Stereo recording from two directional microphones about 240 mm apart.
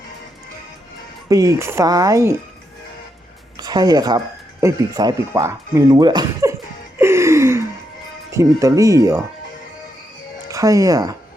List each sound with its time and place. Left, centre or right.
1.3 s speech: centre
3.6 s speech: centre
7.0 s gasp: centre
8.3 s speech: centre
10.5 s speech: centre